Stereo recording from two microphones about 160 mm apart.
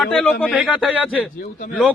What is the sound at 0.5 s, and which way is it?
Speech, 10° right (ahead or behind).